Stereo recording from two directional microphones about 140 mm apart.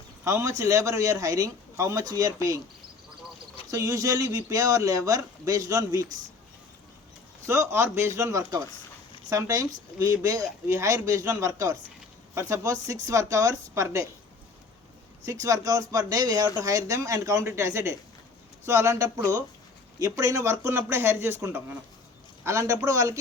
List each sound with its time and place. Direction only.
0.3 s speech: 20° right (ahead or behind)
3.7 s speech: 25° right (ahead or behind)
7.4 s speech: 20° right (ahead or behind)
15.3 s speech: 25° right (ahead or behind)